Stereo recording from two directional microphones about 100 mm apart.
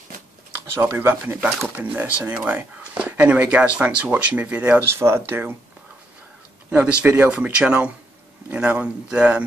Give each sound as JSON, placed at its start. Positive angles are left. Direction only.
{"t": 0.7, "sound": "speech", "side_deg": -20}
{"t": 4.8, "sound": "speech", "side_deg": -25}
{"t": 6.7, "sound": "speech", "side_deg": -15}